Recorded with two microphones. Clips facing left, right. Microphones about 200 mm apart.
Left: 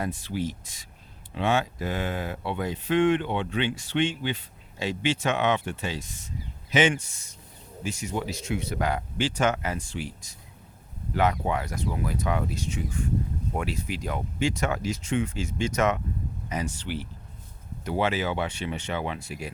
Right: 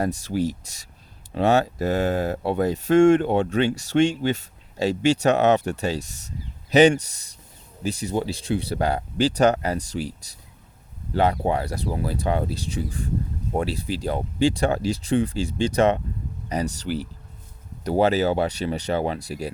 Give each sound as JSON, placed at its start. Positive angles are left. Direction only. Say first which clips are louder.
{"t": 0.0, "sound": "speech", "louder": "right 6 dB", "side_deg": -40}